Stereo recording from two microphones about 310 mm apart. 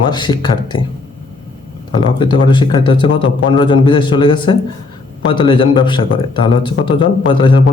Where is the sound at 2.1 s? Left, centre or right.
Centre.